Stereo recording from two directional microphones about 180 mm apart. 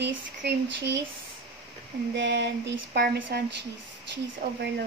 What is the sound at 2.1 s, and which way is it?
A woman's voice, 75° right (ahead or behind).